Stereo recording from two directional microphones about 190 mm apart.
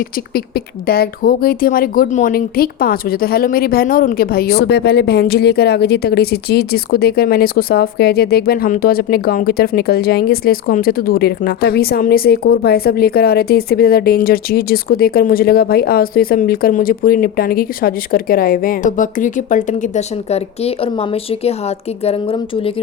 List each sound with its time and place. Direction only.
0.9 s speech: 50° left (ahead or behind); by 20.9 s 35° left (ahead or behind)
22.0 s speech: 30° left (ahead or behind)